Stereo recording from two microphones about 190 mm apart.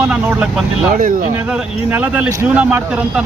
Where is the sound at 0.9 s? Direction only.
45° right (ahead or behind).